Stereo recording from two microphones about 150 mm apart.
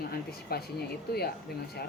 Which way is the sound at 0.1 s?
90° left.